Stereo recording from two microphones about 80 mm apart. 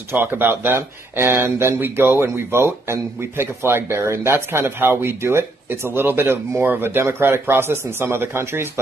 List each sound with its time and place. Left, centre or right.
0.1 s speech: right